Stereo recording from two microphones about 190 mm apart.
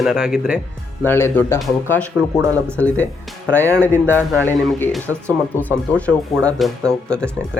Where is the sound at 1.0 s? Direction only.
10° left (ahead or behind).